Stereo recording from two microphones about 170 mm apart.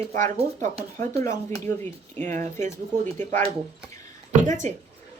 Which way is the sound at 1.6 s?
15° left (ahead or behind).